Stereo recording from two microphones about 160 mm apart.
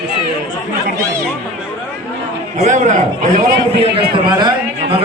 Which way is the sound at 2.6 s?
50° right (ahead or behind).